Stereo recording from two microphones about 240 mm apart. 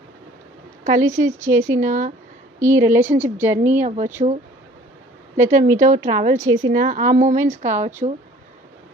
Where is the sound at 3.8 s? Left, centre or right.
Right.